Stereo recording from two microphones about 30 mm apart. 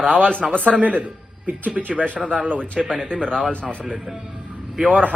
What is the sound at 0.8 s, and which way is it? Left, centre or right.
Speech, right.